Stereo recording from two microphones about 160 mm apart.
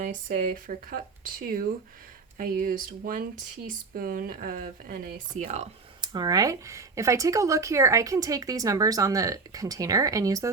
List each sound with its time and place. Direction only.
0.0 s speech: 55° right (ahead or behind)
5.4 s speech: 45° right (ahead or behind)
6.0 s speech: 25° right (ahead or behind)